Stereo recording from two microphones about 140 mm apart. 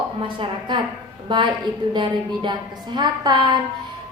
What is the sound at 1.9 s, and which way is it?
A woman's voice, 35° right (ahead or behind).